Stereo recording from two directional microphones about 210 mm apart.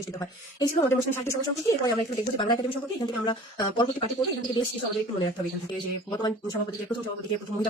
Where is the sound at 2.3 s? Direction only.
20° left (ahead or behind).